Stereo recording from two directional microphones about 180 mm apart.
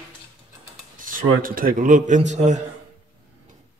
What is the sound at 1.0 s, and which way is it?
Speech, 50° right (ahead or behind).